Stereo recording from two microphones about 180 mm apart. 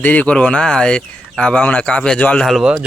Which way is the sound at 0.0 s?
10° left (ahead or behind).